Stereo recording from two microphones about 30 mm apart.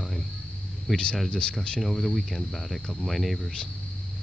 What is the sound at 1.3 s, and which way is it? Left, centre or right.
Speech, left.